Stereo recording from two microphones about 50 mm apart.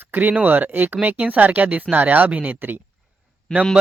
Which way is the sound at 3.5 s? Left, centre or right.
Centre.